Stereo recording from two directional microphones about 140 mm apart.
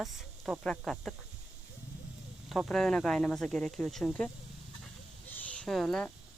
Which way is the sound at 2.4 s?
Centre (ahead or behind).